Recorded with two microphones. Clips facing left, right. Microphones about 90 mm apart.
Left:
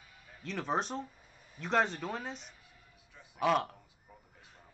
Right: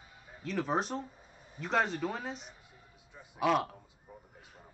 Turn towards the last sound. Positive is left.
turn(degrees=0)  # may be behind; listen again after turning